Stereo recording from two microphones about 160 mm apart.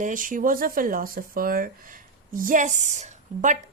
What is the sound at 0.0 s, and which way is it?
Speech, 55° right (ahead or behind).